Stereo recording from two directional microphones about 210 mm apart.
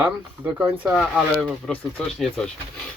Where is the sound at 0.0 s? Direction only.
10° right (ahead or behind).